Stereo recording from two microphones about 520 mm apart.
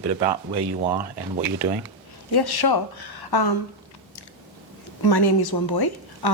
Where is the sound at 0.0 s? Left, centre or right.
Right.